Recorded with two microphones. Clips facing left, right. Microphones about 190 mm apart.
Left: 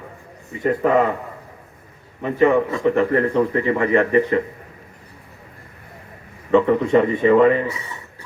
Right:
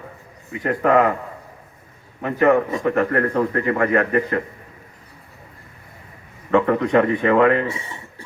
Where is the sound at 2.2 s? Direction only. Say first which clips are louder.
Even; 55° right (ahead or behind).